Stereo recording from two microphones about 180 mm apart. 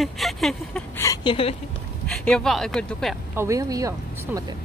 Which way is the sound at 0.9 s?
20° left (ahead or behind).